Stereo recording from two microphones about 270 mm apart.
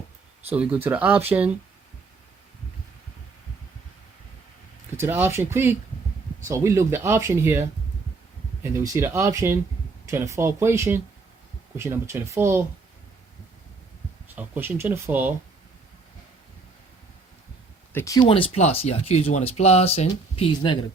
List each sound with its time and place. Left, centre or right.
0.5 s speech: centre
4.9 s speech: centre
8.7 s speech: centre
14.3 s speech: centre
17.9 s speech: centre